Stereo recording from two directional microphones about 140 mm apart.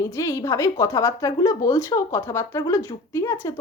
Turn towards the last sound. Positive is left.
turn(degrees=20)  # may be behind; listen again after turning